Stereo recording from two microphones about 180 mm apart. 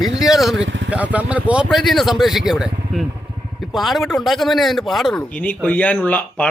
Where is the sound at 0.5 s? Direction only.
90° right.